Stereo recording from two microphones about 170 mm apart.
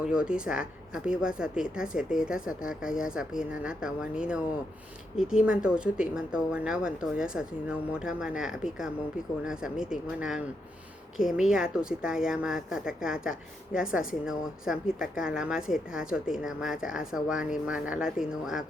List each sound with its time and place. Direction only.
0.0 s speech: 5° right (ahead or behind)